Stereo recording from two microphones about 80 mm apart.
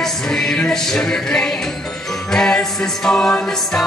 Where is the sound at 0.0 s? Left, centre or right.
Centre.